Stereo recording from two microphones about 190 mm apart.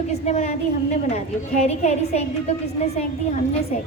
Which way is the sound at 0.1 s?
35° left (ahead or behind).